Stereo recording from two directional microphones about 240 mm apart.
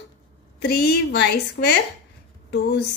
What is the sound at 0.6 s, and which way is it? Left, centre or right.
A woman's voice, left.